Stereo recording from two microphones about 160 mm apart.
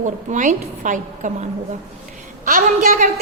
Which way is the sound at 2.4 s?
60° right (ahead or behind).